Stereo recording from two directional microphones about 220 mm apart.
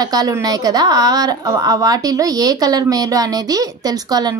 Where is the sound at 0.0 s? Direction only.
15° right (ahead or behind).